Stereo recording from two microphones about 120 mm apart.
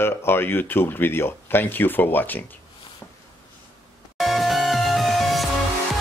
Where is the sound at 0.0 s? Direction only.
20° left (ahead or behind).